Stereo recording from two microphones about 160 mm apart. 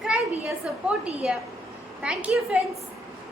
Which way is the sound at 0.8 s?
5° right (ahead or behind).